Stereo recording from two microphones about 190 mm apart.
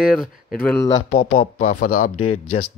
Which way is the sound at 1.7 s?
40° left (ahead or behind).